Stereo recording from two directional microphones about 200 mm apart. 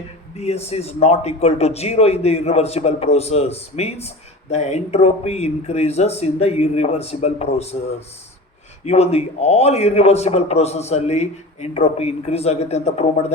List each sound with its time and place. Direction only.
0.3 s a man's voice: 30° left (ahead or behind)